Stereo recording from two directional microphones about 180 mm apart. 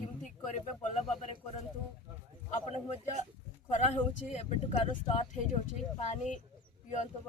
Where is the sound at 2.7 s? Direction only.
40° left (ahead or behind).